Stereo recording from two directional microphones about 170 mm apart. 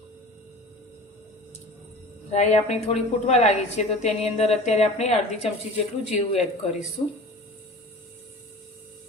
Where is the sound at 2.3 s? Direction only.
40° left (ahead or behind).